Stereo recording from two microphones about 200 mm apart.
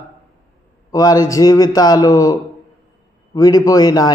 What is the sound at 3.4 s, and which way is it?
Speech, 15° left (ahead or behind).